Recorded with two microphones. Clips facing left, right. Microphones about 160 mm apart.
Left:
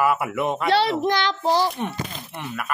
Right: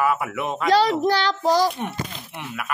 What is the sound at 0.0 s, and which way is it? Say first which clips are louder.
Speech: left 1 dB; 5° left (ahead or behind).